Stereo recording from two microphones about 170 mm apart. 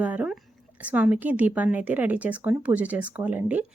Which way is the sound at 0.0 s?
10° right (ahead or behind).